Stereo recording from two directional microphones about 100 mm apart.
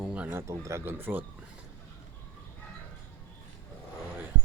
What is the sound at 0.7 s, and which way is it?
Speech, 25° right (ahead or behind).